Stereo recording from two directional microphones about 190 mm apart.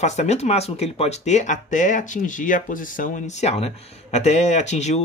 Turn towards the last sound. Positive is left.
turn(degrees=35)  # may be behind; listen again after turning